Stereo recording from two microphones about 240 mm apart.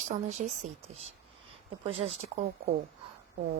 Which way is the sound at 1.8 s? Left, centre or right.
Right.